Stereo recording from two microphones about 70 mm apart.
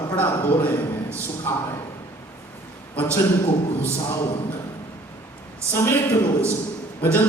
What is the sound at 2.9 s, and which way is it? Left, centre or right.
Speech, left.